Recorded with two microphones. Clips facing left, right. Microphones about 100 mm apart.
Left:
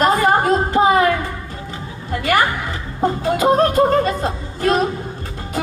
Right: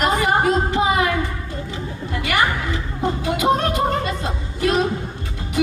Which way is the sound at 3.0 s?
40° left (ahead or behind).